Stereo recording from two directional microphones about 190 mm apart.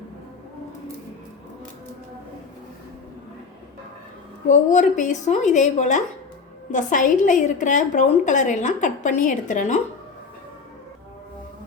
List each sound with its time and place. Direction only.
4.4 s a woman's voice: 40° left (ahead or behind)